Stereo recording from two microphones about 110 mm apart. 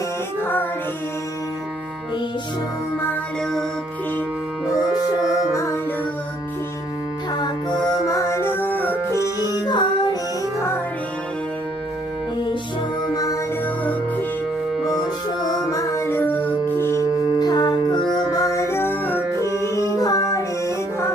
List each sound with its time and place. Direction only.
0.4 s music: 20° left (ahead or behind)
5.5 s music: 25° left (ahead or behind)
7.3 s music: 40° left (ahead or behind); by 9.0 s 15° left (ahead or behind)
9.6 s music: 40° left (ahead or behind)
13.1 s music: 30° left (ahead or behind)
15.4 s music: 35° left (ahead or behind)
17.4 s music: 40° left (ahead or behind); by 19.5 s 20° left (ahead or behind)
20.0 s music: 35° left (ahead or behind)